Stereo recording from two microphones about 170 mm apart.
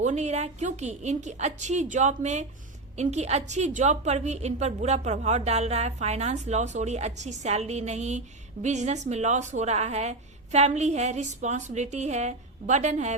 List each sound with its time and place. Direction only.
0.0 s a woman's voice: 45° right (ahead or behind)